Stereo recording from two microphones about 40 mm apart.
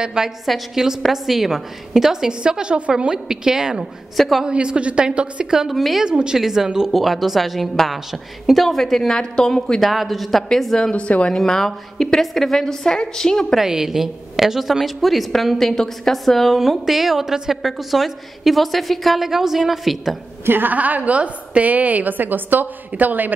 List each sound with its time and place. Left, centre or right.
0.0 s a woman's voice: centre
4.5 s a woman's voice: right
5.7 s a woman's voice: centre
6.0 s a woman's voice: centre
8.6 s a woman's voice: centre
9.8 s a woman's voice: centre
10.8 s speech: left
11.3 s a woman's voice: centre
13.6 s a woman's voice: centre
16.5 s a woman's voice: centre
20.4 s a woman's voice: right
20.7 s a woman's voice: right